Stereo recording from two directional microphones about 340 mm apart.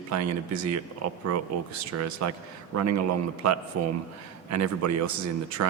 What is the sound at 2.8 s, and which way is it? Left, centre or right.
Speech, right.